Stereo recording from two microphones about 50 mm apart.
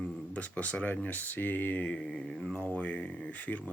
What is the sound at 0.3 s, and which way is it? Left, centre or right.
Speech, left.